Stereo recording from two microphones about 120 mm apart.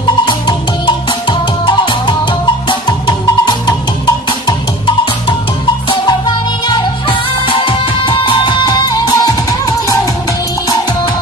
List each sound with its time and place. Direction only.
0.2 s music: 40° left (ahead or behind)
6.7 s music: 50° left (ahead or behind); by 9.9 s 30° left (ahead or behind)